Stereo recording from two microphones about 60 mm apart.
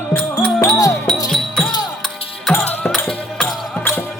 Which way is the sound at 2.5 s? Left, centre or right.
Centre.